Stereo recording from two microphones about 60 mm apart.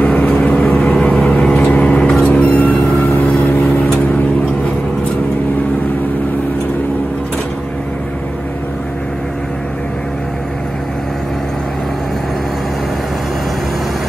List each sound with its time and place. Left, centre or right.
0.0 s vehicle: left